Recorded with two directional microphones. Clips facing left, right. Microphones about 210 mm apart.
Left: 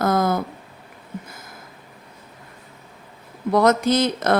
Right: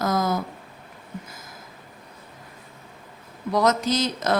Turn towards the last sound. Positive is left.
turn(degrees=55)  # may be behind; listen again after turning